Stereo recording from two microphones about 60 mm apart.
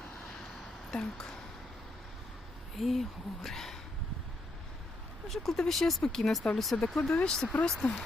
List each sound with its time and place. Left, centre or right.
0.6 s a sound: centre
2.7 s speech: centre
5.3 s speech: centre